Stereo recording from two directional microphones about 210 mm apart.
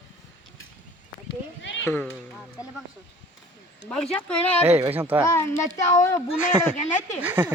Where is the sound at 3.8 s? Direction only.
5° left (ahead or behind).